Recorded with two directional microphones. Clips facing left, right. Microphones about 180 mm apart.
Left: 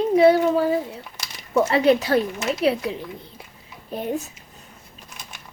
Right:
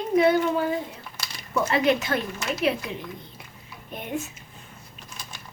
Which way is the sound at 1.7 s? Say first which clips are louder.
Left 4 dB; 35° left (ahead or behind).